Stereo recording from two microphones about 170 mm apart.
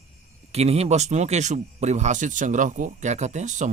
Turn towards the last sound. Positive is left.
turn(degrees=-45)  # may be behind; listen again after turning